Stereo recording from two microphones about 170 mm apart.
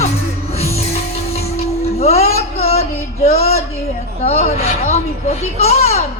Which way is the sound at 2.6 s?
40° left (ahead or behind).